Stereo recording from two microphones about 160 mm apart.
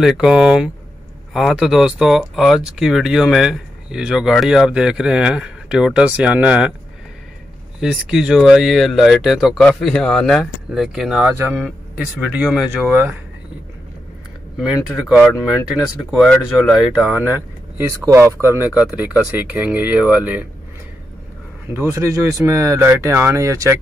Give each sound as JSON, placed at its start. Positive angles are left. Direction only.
{"t": 0.0, "sound": "speech", "side_deg": -5}
{"t": 7.8, "sound": "speech", "side_deg": -5}
{"t": 16.1, "sound": "speech", "side_deg": 0}
{"t": 21.6, "sound": "speech", "side_deg": -15}